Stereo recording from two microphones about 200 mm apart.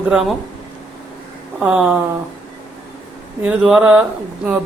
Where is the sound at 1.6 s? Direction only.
5° right (ahead or behind).